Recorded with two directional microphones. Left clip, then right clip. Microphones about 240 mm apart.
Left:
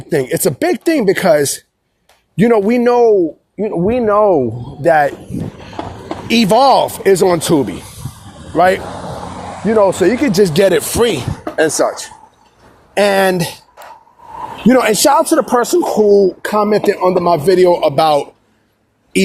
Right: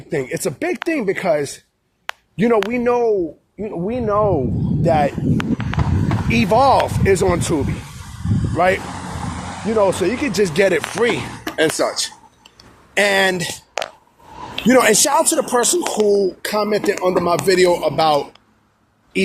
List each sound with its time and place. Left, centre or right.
0.1 s speech: left
6.2 s speech: left
11.5 s speech: centre
12.9 s speech: left
14.6 s speech: left